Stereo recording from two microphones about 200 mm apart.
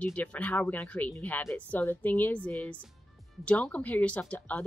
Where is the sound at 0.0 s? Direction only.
5° left (ahead or behind).